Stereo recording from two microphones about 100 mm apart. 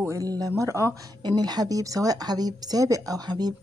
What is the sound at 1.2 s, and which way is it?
Speech, 45° right (ahead or behind).